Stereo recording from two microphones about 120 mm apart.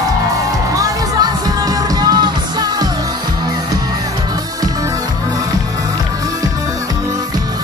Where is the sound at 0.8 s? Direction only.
30° right (ahead or behind).